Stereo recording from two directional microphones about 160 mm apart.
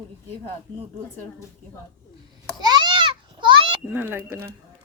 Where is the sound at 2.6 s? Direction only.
25° right (ahead or behind).